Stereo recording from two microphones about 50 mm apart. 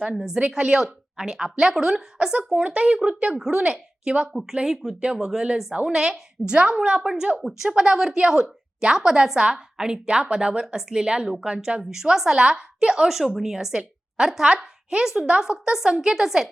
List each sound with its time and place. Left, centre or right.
0.0 s a woman's voice: centre